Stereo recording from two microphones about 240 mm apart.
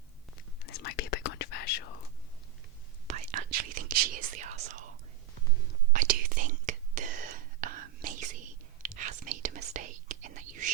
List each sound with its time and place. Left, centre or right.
0.7 s whispering: left
3.1 s whispering: right
5.9 s whispering: right